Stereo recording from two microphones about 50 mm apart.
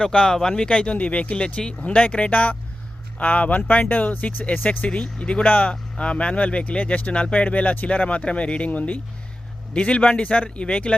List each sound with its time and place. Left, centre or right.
0.0 s speech: centre; by 4.9 s left
4.9 s speech: centre
5.4 s speech: left